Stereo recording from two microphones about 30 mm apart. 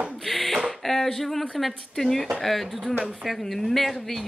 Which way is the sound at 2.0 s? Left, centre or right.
Centre.